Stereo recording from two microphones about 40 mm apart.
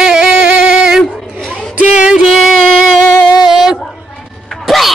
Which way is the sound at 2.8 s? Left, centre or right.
Centre.